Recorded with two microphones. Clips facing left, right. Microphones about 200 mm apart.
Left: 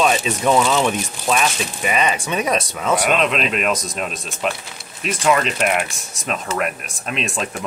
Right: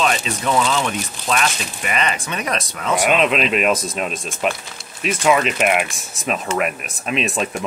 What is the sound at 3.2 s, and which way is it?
Speech, 5° right (ahead or behind).